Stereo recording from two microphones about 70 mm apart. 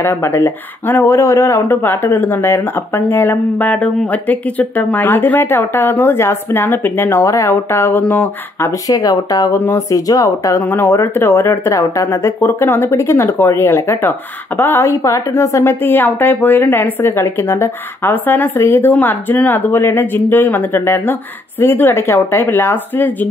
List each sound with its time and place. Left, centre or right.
0.0 s a woman's voice: left
1.1 s a man's voice: left
1.7 s a woman's voice: left
7.1 s a woman's voice: left
8.8 s speech: left
9.6 s a woman's voice: left
9.8 s speech: left
10.6 s a woman's voice: left
15.0 s a woman's voice: left